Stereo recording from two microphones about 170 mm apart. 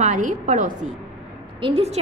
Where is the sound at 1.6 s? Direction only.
35° right (ahead or behind).